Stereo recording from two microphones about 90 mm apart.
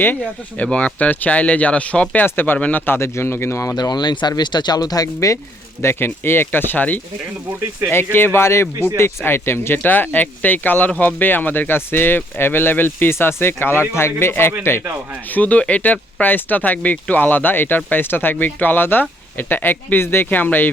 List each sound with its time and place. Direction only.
0.5 s speech: 15° left (ahead or behind); by 3.8 s 35° left (ahead or behind)
3.8 s speech: 50° left (ahead or behind)
5.8 s speech: 25° left (ahead or behind)